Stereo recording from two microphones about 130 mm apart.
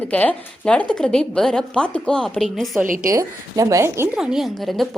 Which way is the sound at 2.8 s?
90° right.